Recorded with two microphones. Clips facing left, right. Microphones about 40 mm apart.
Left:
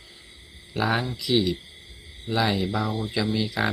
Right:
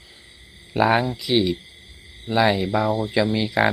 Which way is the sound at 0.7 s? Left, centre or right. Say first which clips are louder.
Right 6 dB; right.